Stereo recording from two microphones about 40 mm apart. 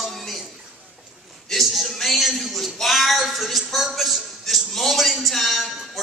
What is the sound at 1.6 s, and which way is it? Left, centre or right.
Music, centre.